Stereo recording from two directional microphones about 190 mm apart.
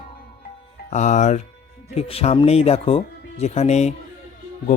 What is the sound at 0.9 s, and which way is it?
A man's voice, 40° left (ahead or behind).